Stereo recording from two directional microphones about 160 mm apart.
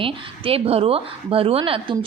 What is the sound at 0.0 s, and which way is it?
A woman's voice, 35° right (ahead or behind).